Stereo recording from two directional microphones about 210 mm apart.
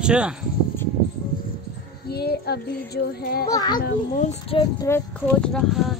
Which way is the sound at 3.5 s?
20° left (ahead or behind).